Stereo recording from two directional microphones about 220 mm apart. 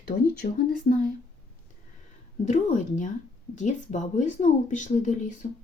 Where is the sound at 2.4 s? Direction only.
30° left (ahead or behind).